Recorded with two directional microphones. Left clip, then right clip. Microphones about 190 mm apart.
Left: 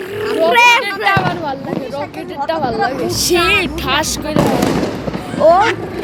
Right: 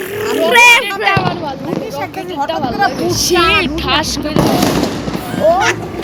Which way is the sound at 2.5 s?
50° left (ahead or behind).